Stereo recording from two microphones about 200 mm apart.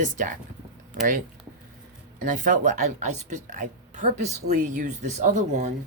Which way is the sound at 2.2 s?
40° right (ahead or behind).